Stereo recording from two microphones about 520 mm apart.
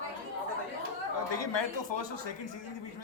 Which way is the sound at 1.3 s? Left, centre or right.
Left.